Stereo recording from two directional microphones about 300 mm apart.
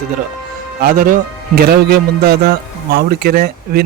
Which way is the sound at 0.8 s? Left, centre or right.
Right.